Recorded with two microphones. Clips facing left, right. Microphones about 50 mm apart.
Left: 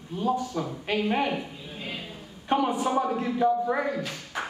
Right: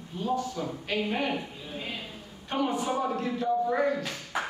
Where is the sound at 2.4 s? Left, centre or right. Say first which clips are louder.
Left 4 dB; left.